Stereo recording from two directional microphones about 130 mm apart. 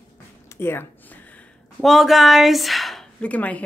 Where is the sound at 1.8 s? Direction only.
Centre (ahead or behind).